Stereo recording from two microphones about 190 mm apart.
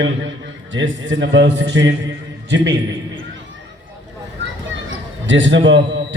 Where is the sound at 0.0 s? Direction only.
80° right.